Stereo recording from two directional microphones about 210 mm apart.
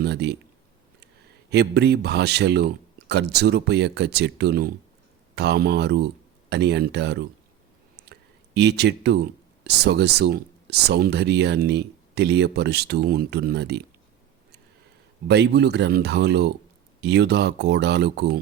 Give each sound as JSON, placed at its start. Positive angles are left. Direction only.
{"t": 0.0, "sound": "speech", "side_deg": -50}
{"t": 1.5, "sound": "speech", "side_deg": -50}
{"t": 8.1, "sound": "a sound", "side_deg": -55}
{"t": 9.6, "sound": "speech", "side_deg": -55}
{"t": 15.3, "sound": "speech", "side_deg": -55}